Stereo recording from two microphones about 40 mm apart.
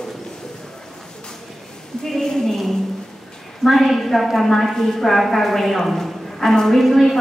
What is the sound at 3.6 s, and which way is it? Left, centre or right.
A woman's voice, centre.